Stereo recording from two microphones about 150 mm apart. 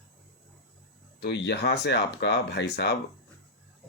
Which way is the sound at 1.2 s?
90° left.